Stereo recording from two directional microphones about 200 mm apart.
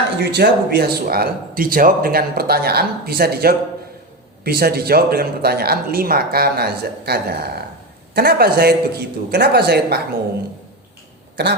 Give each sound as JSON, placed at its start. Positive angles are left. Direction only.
{"t": 0.2, "sound": "speech", "side_deg": -55}